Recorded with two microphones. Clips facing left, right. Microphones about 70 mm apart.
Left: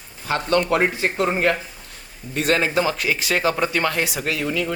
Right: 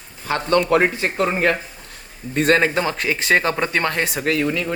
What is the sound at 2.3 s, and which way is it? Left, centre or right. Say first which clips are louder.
Speech: right 3 dB; right.